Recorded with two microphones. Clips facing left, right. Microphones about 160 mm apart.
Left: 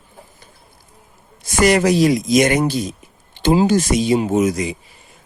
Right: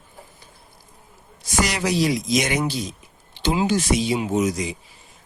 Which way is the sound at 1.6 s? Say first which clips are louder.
Left 9 dB; 50° left (ahead or behind).